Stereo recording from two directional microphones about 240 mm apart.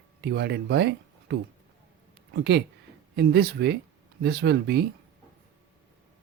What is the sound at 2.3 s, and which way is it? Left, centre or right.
Speech, right.